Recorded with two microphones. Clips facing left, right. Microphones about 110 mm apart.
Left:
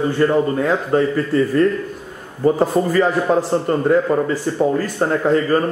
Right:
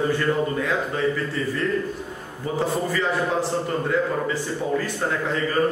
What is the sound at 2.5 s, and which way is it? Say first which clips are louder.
Speech: left 8 dB; 45° left (ahead or behind).